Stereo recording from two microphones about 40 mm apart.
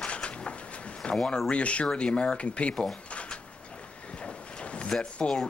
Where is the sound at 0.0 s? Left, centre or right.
Left.